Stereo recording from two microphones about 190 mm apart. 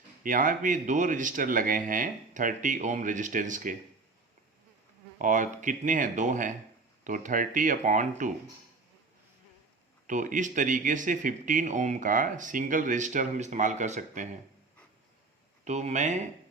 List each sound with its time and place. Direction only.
0.2 s speech: 45° right (ahead or behind)
5.2 s speech: 45° right (ahead or behind)
10.1 s speech: 40° right (ahead or behind)
15.6 s speech: 35° right (ahead or behind)